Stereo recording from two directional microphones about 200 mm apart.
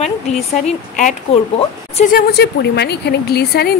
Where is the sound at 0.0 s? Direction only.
35° left (ahead or behind).